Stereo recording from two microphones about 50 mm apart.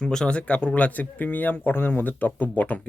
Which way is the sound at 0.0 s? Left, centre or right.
Centre.